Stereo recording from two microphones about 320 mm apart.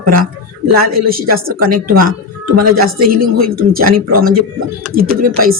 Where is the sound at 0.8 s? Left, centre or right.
Right.